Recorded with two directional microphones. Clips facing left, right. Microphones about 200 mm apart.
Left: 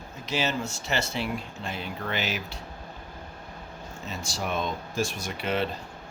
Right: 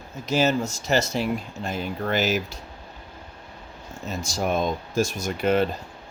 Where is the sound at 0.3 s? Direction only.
45° right (ahead or behind).